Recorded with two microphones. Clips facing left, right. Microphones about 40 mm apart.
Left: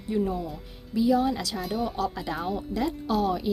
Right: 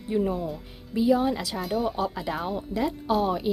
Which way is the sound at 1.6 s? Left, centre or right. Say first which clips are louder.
Right 2 dB; centre.